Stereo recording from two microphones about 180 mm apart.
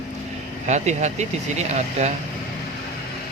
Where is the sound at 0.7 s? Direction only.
40° right (ahead or behind).